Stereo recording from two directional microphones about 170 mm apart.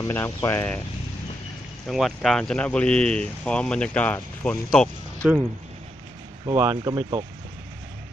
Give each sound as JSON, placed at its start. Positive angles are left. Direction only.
{"t": 0.0, "sound": "speech", "side_deg": 15}
{"t": 1.9, "sound": "speech", "side_deg": 0}
{"t": 5.2, "sound": "speech", "side_deg": -15}